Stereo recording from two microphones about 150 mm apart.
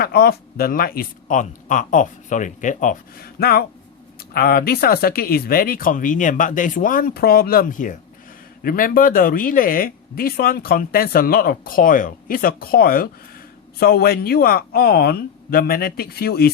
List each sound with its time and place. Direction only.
0.0 s speech: 90° left; by 7.9 s 60° left (ahead or behind)
8.6 s speech: 70° left (ahead or behind); by 16.5 s 90° left